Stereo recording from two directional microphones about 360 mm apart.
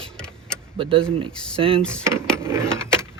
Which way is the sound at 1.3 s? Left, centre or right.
Centre.